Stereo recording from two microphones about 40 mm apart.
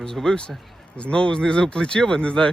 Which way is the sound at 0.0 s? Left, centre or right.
Centre.